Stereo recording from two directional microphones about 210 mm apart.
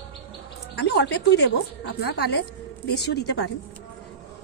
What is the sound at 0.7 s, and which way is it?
A woman's voice, 55° left (ahead or behind).